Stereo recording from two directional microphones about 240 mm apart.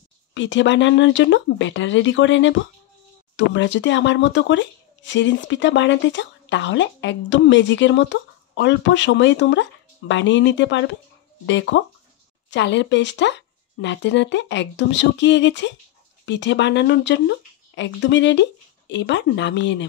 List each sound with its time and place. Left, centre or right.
0.3 s speech: left